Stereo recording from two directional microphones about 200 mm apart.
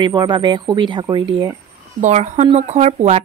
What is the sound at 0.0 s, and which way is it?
Speech, 20° right (ahead or behind).